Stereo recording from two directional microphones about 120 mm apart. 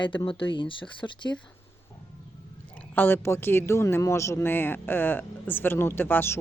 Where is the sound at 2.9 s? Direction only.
15° left (ahead or behind).